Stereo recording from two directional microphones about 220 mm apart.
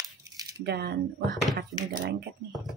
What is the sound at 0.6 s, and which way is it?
Speech, 45° right (ahead or behind).